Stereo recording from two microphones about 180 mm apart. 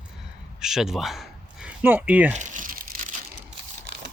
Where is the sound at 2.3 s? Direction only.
45° right (ahead or behind).